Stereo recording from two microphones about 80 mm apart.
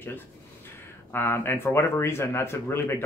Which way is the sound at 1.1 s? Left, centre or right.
Left.